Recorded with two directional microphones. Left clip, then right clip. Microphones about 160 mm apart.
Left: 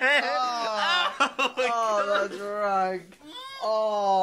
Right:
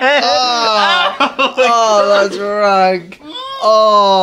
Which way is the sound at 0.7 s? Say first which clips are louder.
Right 11 dB; 15° left (ahead or behind).